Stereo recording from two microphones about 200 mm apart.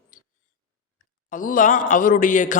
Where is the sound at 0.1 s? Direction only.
40° left (ahead or behind).